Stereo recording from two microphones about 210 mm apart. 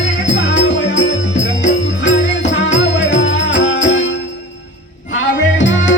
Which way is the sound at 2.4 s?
60° left (ahead or behind).